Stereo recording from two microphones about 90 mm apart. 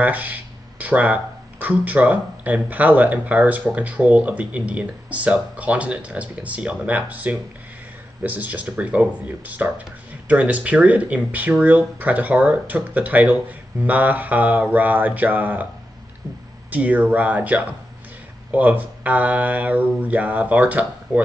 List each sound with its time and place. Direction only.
0.0 s speech: 20° right (ahead or behind)
16.7 s speech: 15° right (ahead or behind)